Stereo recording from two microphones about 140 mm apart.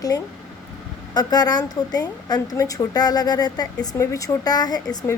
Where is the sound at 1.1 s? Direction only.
30° left (ahead or behind).